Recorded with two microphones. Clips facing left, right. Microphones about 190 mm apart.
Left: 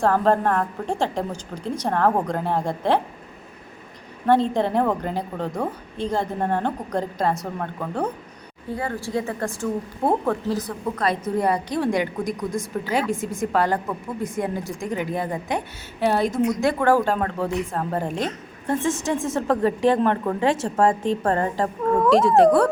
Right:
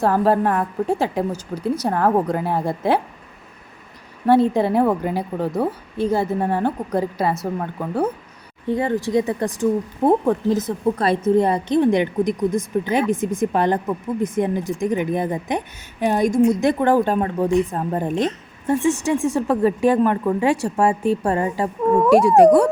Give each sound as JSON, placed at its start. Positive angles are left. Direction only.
{"t": 0.0, "sound": "a woman's voice", "side_deg": -10}
{"t": 4.3, "sound": "a woman's voice", "side_deg": -10}
{"t": 8.7, "sound": "a woman's voice", "side_deg": -20}
{"t": 21.8, "sound": "a woman's voice", "side_deg": -25}
{"t": 22.1, "sound": "a woman's voice", "side_deg": -10}